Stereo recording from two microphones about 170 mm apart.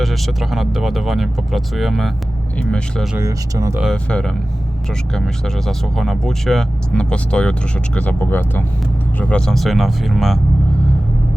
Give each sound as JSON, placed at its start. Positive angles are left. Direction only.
{"t": 0.0, "sound": "speech", "side_deg": 0}
{"t": 3.2, "sound": "speech", "side_deg": -20}
{"t": 3.9, "sound": "speech", "side_deg": 5}